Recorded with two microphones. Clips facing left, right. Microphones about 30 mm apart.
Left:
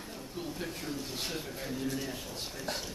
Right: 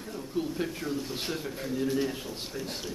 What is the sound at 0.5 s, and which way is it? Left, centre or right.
Speech, centre.